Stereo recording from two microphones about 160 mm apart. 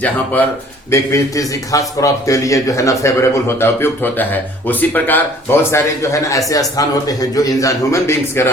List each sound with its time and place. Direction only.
0.9 s a man's voice: 20° left (ahead or behind)